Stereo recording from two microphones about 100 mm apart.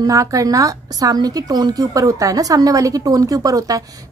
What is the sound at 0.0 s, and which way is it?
Speech, 35° right (ahead or behind).